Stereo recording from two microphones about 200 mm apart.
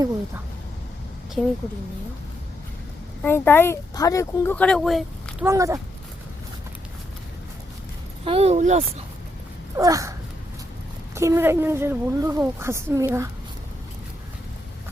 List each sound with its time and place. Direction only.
3.2 s speech: 10° left (ahead or behind)
5.5 s speech: 15° right (ahead or behind)
8.2 s speech: 30° right (ahead or behind)
9.7 s a sound: 15° right (ahead or behind)
11.1 s speech: 15° right (ahead or behind)